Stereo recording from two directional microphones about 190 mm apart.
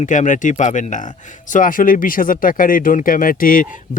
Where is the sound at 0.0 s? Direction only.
40° left (ahead or behind).